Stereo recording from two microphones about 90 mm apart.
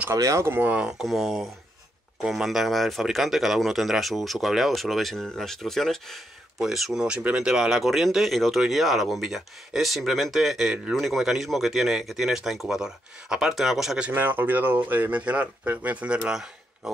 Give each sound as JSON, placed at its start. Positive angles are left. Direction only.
{"t": 0.1, "sound": "speech", "side_deg": -35}
{"t": 1.0, "sound": "speech", "side_deg": 0}
{"t": 14.1, "sound": "speech", "side_deg": -20}